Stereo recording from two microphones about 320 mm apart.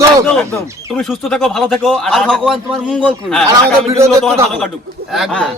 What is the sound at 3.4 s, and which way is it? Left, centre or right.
Speech, centre.